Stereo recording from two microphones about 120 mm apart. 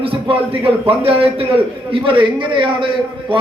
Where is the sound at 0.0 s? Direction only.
50° right (ahead or behind).